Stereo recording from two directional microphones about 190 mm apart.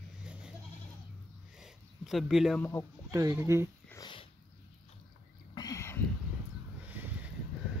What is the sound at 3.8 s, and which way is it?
Sniff, 20° left (ahead or behind).